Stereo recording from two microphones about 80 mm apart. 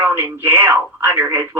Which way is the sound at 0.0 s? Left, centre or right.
Right.